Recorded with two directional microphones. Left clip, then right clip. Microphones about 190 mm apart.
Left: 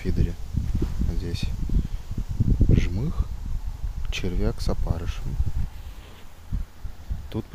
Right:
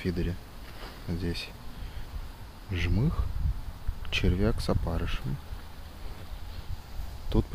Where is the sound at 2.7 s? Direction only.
Centre (ahead or behind).